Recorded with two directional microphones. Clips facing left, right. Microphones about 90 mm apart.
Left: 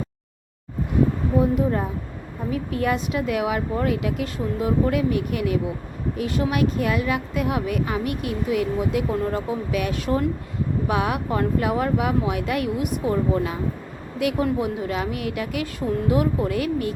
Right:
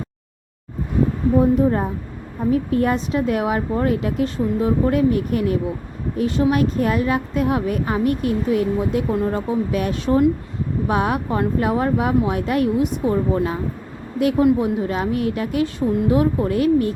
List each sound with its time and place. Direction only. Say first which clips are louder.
1.4 s speech: right 4 dB; 30° right (ahead or behind)
9.0 s speech: right 3 dB; 25° right (ahead or behind)